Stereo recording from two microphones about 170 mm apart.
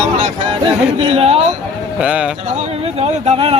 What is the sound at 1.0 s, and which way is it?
Speech, 35° right (ahead or behind).